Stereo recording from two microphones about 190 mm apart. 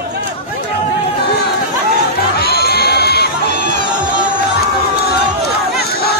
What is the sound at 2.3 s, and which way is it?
Crowd, 55° left (ahead or behind).